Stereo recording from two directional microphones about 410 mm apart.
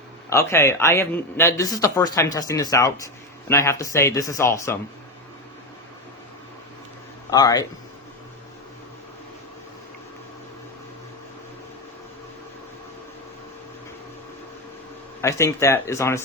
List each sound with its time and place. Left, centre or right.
0.3 s a man's voice: centre
7.3 s speech: centre
15.2 s a man's voice: centre